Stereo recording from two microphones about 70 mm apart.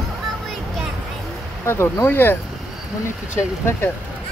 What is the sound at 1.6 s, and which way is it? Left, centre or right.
Speech, left.